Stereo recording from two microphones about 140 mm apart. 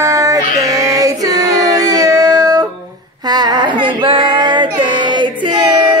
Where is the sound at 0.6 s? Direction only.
25° right (ahead or behind).